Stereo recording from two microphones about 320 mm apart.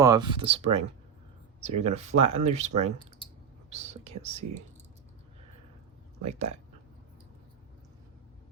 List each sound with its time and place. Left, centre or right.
0.0 s speech: centre